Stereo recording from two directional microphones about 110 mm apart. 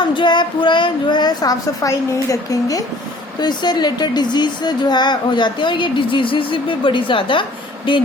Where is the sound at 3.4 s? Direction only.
40° left (ahead or behind).